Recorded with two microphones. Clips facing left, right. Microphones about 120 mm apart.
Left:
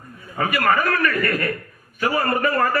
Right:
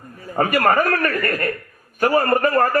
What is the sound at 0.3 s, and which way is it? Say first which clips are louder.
A man's voice: right 3 dB; 40° right (ahead or behind).